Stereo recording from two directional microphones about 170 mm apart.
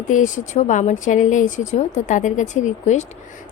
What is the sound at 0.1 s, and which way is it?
A woman's voice, 45° left (ahead or behind).